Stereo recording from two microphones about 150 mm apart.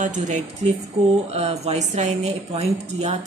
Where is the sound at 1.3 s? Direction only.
45° right (ahead or behind).